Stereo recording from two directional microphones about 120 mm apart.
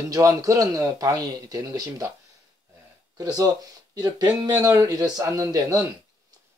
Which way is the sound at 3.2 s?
30° right (ahead or behind).